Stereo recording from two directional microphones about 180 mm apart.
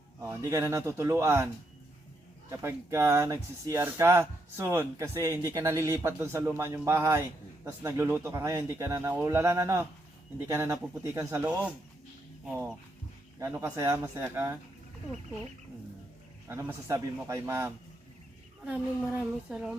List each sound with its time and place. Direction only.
0.2 s speech: 15° right (ahead or behind)
2.5 s speech: 15° right (ahead or behind)
13.4 s speech: 10° right (ahead or behind)
16.5 s speech: 15° right (ahead or behind)